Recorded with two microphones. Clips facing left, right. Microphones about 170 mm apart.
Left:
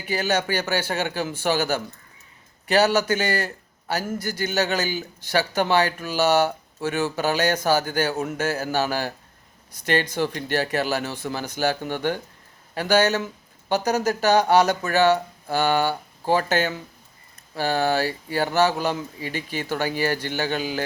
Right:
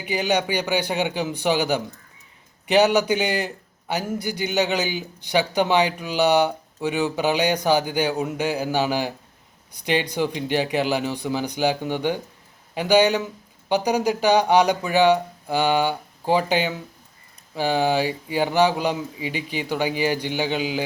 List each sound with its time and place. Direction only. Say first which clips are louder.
0.0 s a man's voice: right 1 dB; 15° right (ahead or behind)
8.1 s a man's voice: right 1 dB; centre (ahead or behind)
8.4 s a man's voice: right 1 dB; 15° right (ahead or behind)